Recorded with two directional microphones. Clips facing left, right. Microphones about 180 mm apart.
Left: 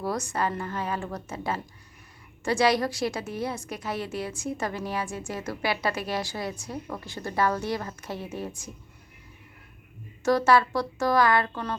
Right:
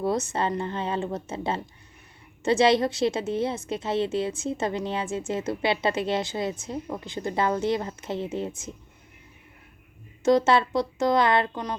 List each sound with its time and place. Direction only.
0.0 s a woman's voice: 25° right (ahead or behind)
10.2 s a woman's voice: 20° right (ahead or behind)